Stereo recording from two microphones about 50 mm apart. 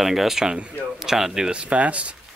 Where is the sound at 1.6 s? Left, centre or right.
Right.